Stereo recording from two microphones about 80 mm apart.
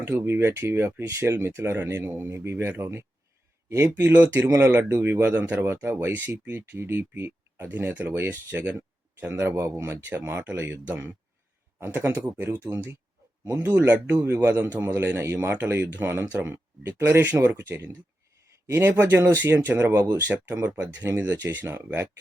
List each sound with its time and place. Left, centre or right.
0.0 s speech: right
4.1 s a man's voice: centre
13.4 s speech: right
13.7 s a man's voice: right